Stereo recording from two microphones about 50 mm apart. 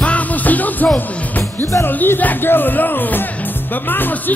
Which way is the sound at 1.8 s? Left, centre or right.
Left.